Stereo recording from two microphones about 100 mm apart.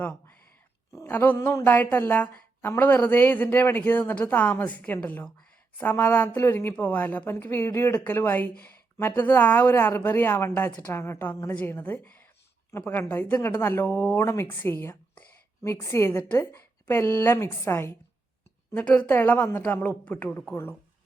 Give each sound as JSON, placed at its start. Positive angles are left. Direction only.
{"t": 1.1, "sound": "a woman's voice", "side_deg": 15}
{"t": 18.7, "sound": "a woman's voice", "side_deg": 15}